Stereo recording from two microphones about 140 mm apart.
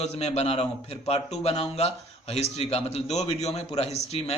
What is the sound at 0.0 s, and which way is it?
A man's voice, 50° left (ahead or behind).